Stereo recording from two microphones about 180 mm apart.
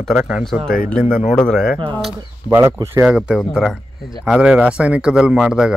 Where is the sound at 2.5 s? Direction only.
15° right (ahead or behind).